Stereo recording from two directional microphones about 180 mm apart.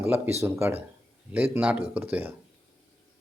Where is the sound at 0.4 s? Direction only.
15° right (ahead or behind).